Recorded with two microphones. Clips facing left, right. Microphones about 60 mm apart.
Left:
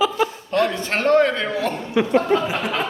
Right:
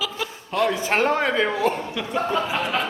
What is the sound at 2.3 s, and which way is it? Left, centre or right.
Speech, centre.